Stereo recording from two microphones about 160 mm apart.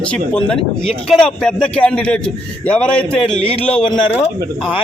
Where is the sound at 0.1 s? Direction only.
5° left (ahead or behind).